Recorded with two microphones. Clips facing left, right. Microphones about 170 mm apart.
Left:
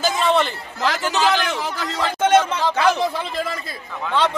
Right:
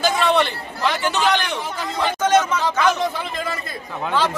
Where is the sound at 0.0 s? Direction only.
Centre (ahead or behind).